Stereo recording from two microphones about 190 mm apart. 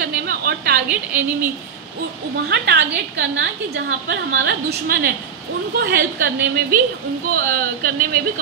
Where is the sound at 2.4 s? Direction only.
55° right (ahead or behind).